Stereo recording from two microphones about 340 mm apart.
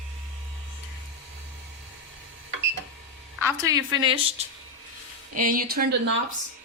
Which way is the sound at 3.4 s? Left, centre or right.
Centre.